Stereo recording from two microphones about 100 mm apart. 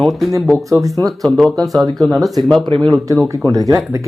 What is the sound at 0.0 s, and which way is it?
Speech, centre (ahead or behind).